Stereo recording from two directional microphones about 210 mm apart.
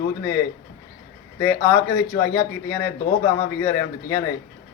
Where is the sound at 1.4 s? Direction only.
15° left (ahead or behind).